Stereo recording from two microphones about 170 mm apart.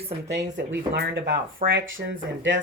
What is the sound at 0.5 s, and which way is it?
Speech, 85° right.